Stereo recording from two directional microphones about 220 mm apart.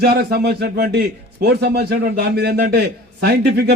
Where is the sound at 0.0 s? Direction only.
45° right (ahead or behind).